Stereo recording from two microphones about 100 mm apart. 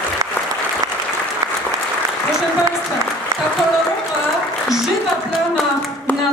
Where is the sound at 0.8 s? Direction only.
35° right (ahead or behind).